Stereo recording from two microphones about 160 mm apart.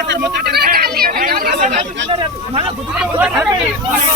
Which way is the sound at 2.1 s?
35° right (ahead or behind).